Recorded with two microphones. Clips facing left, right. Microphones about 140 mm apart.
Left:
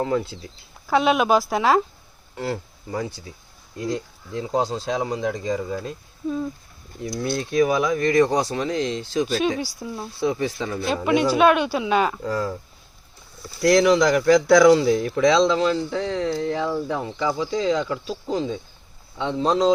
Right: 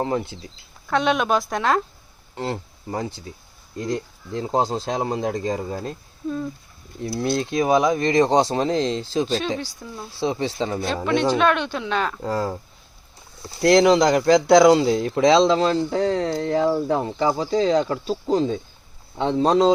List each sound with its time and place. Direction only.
0.0 s speech: 25° right (ahead or behind)
0.9 s a woman's voice: 5° left (ahead or behind)
2.3 s speech: 25° right (ahead or behind)
4.3 s speech: 35° right (ahead or behind)
6.2 s a woman's voice: 5° left (ahead or behind)
7.0 s speech: 30° right (ahead or behind)
9.6 s speech: 10° left (ahead or behind)
10.2 s speech: 25° right (ahead or behind)
10.8 s speech: 10° left (ahead or behind)
12.2 s speech: 30° right (ahead or behind)
13.6 s speech: 30° right (ahead or behind); by 16.7 s 45° right (ahead or behind)
16.7 s speech: 55° right (ahead or behind)
17.2 s speech: 40° right (ahead or behind)